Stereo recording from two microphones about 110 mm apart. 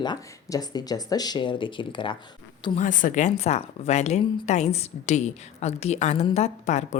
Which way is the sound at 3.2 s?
75° left (ahead or behind).